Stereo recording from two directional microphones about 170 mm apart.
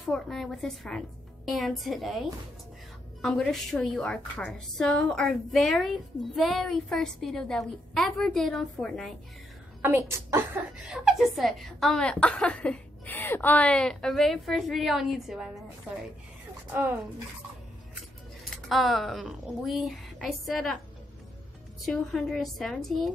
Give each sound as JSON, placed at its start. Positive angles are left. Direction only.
{"t": 0.1, "sound": "a woman's voice", "side_deg": 0}
{"t": 9.8, "sound": "a woman's voice", "side_deg": -15}
{"t": 10.9, "sound": "a woman's voice", "side_deg": 0}
{"t": 16.7, "sound": "a woman's voice", "side_deg": -15}
{"t": 18.7, "sound": "a woman's voice", "side_deg": 0}
{"t": 21.8, "sound": "a woman's voice", "side_deg": 0}